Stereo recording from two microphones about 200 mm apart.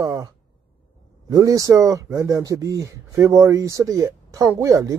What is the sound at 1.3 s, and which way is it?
Speech, 15° right (ahead or behind).